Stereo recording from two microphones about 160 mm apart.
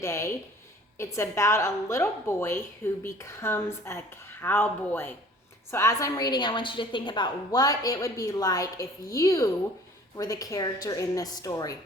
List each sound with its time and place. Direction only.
0.0 s a woman's voice: 15° left (ahead or behind)